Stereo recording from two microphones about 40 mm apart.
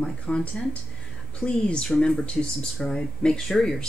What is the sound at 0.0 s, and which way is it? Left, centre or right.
Speech, left.